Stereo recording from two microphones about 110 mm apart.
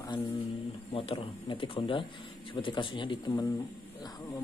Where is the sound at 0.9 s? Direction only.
55° left (ahead or behind).